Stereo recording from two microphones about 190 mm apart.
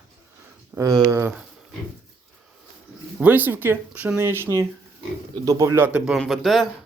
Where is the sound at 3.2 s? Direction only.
10° right (ahead or behind).